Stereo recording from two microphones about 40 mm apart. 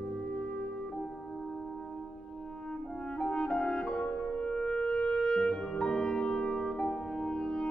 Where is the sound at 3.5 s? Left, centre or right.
Left.